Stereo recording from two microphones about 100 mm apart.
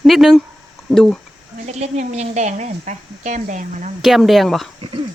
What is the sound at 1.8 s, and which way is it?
Speech, 90° right.